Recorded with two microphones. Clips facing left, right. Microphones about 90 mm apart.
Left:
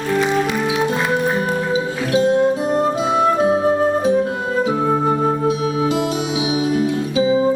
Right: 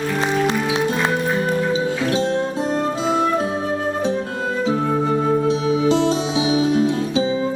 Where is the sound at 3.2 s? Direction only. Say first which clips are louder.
Left 5 dB; 35° left (ahead or behind).